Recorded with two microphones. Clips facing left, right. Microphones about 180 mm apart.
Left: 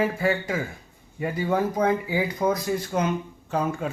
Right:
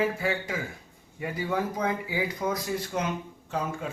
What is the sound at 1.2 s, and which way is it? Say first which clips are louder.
A man's voice: left 5 dB; 45° left (ahead or behind).